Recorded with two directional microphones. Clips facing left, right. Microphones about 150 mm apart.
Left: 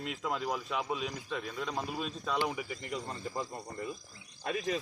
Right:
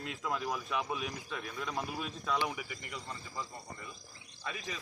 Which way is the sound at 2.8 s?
45° left (ahead or behind).